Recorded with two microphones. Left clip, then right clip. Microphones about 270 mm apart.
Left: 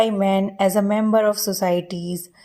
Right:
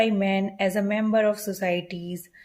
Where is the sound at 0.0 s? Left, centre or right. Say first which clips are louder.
Left 5 dB; left.